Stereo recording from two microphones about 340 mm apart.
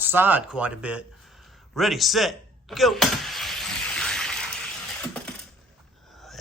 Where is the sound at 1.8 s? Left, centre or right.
Centre.